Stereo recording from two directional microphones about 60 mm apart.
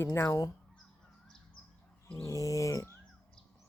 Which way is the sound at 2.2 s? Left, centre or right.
Left.